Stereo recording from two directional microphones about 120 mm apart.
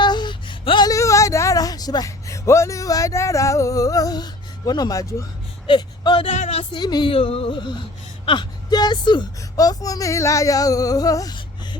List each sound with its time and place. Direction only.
0.0 s a sound: 40° left (ahead or behind)
0.9 s speech: 25° left (ahead or behind)
6.3 s music: 75° left (ahead or behind)
6.7 s speech: 40° left (ahead or behind)
7.1 s speech: 50° left (ahead or behind); by 11.3 s 30° left (ahead or behind)